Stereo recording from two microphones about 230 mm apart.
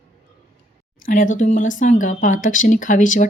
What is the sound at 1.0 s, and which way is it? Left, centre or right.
Speech, left.